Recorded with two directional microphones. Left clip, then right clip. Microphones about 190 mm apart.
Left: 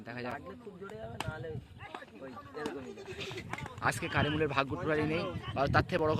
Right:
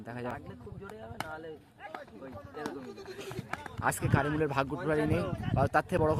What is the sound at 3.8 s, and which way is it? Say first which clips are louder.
A man's voice: right 1 dB; 20° right (ahead or behind).